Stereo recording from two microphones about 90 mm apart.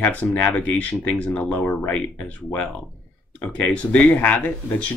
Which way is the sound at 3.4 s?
15° left (ahead or behind).